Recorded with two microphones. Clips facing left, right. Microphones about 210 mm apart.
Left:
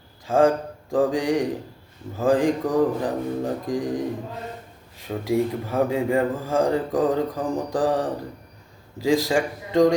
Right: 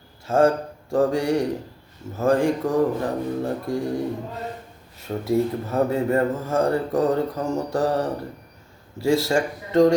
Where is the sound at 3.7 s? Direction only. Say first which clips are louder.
Even; 15° left (ahead or behind).